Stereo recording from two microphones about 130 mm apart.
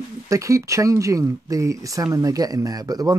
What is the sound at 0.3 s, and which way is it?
Speech, 25° right (ahead or behind).